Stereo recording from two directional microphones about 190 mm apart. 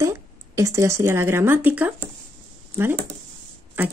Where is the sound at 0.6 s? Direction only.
15° right (ahead or behind).